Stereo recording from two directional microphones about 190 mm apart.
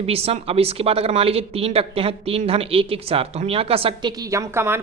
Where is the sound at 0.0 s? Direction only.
30° right (ahead or behind).